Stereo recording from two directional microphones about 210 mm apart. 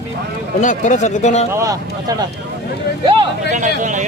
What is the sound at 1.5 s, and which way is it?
Speech, 15° right (ahead or behind).